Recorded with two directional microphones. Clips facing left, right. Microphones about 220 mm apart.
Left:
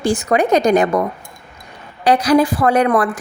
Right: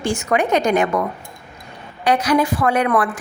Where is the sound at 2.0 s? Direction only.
35° left (ahead or behind).